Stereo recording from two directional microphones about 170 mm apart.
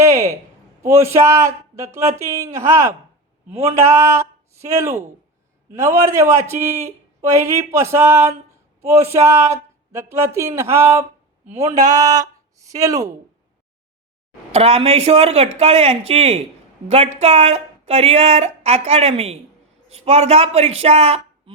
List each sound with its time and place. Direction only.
0.0 s a sound: 20° right (ahead or behind)
0.8 s speech: 15° right (ahead or behind)
3.5 s speech: 35° right (ahead or behind)
3.8 s speech: 15° right (ahead or behind)
14.5 s speech: 35° right (ahead or behind)